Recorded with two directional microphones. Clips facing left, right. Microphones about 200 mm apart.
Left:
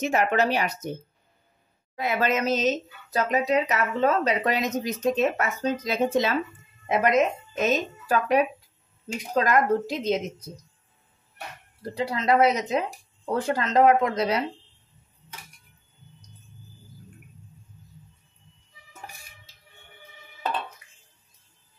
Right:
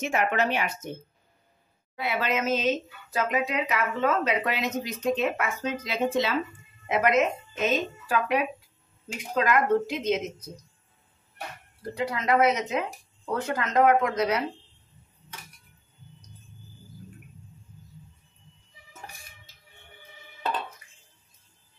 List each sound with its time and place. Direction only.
0.0 s speech: 35° left (ahead or behind)
2.0 s speech: 45° left (ahead or behind)
11.9 s speech: 30° left (ahead or behind)